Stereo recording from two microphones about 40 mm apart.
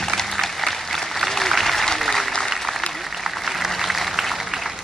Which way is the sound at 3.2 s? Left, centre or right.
Centre.